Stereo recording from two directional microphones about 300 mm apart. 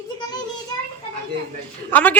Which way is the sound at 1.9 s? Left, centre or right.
Centre.